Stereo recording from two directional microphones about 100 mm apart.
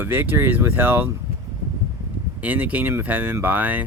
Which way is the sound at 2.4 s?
15° right (ahead or behind).